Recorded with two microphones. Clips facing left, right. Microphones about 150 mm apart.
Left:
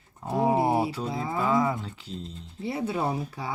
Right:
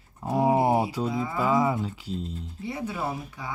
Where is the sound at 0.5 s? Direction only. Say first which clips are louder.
Right 2 dB; 25° right (ahead or behind).